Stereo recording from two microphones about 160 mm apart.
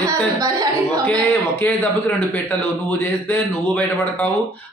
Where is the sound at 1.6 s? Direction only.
10° left (ahead or behind).